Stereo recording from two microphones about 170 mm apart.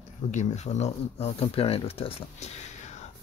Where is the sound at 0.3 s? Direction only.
45° left (ahead or behind).